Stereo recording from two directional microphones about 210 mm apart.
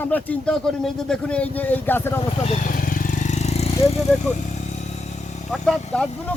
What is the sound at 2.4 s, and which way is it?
Vehicle, 35° left (ahead or behind).